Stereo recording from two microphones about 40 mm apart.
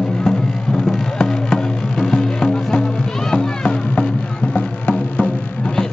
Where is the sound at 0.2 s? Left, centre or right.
Centre.